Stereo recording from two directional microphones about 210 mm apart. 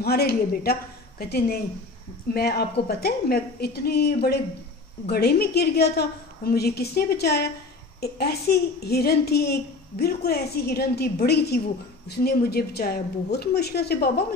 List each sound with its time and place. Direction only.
0.0 s a woman's voice: 50° left (ahead or behind)